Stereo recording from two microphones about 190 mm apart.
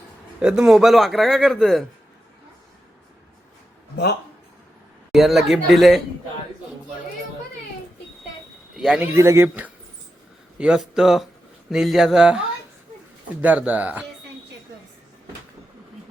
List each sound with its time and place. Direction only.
0.3 s a man's voice: 5° right (ahead or behind)
3.9 s speech: 60° left (ahead or behind)
5.1 s a man's voice: centre (ahead or behind)
8.7 s a man's voice: 5° right (ahead or behind)